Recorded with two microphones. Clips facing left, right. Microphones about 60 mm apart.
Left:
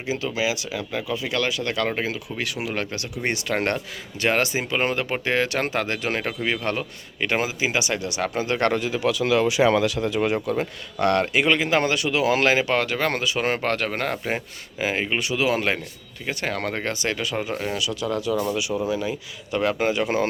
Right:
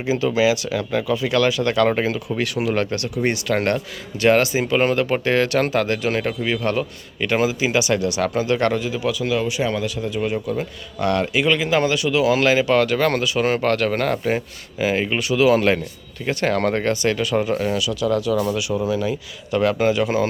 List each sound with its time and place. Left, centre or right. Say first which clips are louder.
0.1 s speech: right 7 dB; centre
3.2 s speech: right 3 dB; left
8.4 s speech: right 2 dB; left
10.6 s speech: left 1 dB; left; by 15.8 s centre
16.2 s speech: right 7 dB; centre
16.8 s speech: right 6 dB; left
17.7 s speech: right 5 dB; left